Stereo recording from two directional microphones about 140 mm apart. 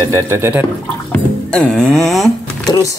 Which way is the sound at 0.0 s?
20° right (ahead or behind).